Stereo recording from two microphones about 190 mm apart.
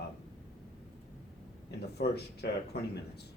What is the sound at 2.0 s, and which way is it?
Speech, 60° left (ahead or behind).